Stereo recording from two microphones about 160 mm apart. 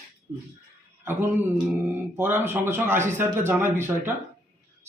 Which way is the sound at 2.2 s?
15° right (ahead or behind).